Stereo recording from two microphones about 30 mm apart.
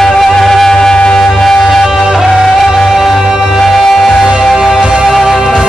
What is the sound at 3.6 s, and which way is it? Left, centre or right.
Music, centre.